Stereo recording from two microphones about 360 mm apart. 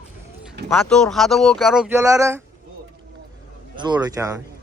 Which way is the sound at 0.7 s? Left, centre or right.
Centre.